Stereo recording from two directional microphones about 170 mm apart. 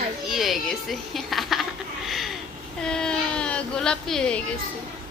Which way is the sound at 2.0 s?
Centre (ahead or behind).